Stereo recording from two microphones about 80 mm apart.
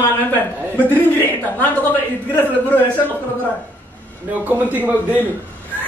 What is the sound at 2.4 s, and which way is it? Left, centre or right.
Speech, left.